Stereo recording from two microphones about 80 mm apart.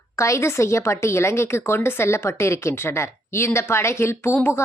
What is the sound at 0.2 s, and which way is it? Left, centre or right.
A woman's voice, left.